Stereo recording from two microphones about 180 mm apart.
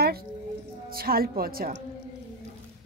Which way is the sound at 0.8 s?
55° right (ahead or behind).